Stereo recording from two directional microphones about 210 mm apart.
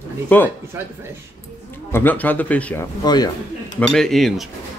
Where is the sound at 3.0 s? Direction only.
20° left (ahead or behind).